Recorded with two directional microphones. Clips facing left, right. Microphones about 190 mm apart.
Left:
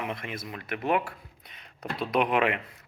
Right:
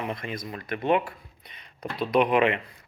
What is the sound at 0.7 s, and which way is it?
Speech, 25° right (ahead or behind).